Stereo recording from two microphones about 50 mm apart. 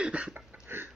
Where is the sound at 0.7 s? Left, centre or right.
Right.